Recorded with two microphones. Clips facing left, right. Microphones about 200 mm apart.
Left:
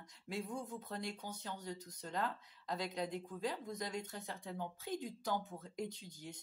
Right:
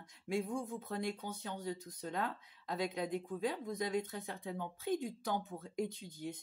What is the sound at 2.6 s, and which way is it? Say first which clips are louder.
Speech: right 3 dB; 50° right (ahead or behind).